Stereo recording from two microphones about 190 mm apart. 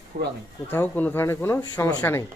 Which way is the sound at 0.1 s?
45° right (ahead or behind).